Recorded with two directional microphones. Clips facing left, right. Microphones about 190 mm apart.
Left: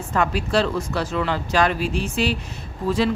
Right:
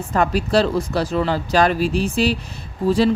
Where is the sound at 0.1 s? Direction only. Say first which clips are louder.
Right 3 dB; 35° right (ahead or behind).